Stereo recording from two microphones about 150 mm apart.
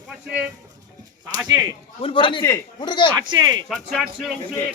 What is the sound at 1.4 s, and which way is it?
Speech, 25° right (ahead or behind).